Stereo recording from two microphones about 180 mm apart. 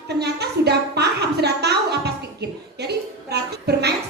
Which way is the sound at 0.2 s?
65° right (ahead or behind).